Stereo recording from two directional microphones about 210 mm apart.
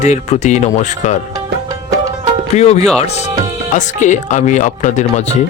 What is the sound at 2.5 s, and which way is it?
Speech, 30° left (ahead or behind).